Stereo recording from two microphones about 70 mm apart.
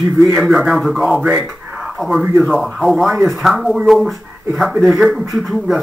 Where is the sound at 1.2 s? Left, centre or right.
Centre.